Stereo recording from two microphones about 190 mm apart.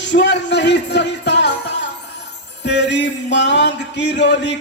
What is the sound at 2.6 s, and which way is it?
Speech, 65° left (ahead or behind).